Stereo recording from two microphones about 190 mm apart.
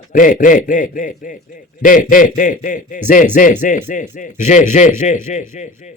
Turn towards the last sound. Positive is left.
turn(degrees=40)  # may be behind; listen again after turning